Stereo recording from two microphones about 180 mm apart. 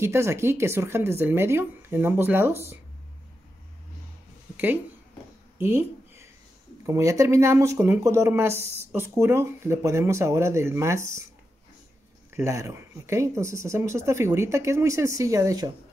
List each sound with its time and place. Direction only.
0.0 s speech: 15° right (ahead or behind)
5.6 s a sound: 15° right (ahead or behind)
6.9 s speech: 15° right (ahead or behind)
12.3 s speech: 15° right (ahead or behind)